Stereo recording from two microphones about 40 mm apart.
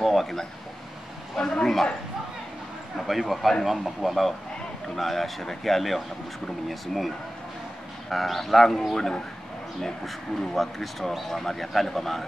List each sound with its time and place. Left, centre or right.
0.0 s speech: centre
1.3 s a man's voice: centre
3.1 s speech: centre
8.1 s speech: centre